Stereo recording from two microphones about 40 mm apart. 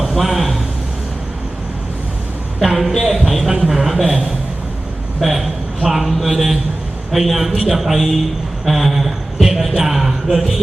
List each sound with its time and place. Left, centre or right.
0.2 s a man's voice: centre
2.6 s a man's voice: centre
4.0 s a man's voice: centre
5.2 s a man's voice: centre
8.6 s a sound: centre
9.8 s a man's voice: centre